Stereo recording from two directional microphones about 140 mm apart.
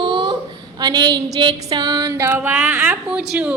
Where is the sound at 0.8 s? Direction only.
30° right (ahead or behind).